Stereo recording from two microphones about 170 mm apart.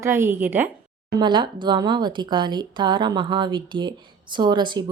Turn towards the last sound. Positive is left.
turn(degrees=-25)  # may be behind; listen again after turning